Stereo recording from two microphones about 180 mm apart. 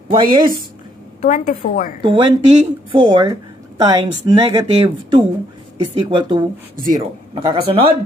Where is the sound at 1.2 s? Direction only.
50° left (ahead or behind).